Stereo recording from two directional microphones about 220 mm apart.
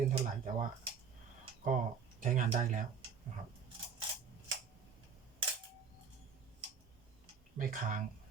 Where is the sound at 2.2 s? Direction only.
35° right (ahead or behind).